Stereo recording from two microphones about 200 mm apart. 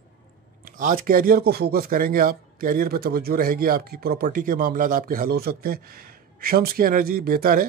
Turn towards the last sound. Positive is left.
turn(degrees=-45)  # may be behind; listen again after turning